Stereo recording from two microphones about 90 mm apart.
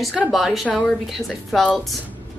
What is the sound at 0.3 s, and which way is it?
A woman's voice, centre (ahead or behind).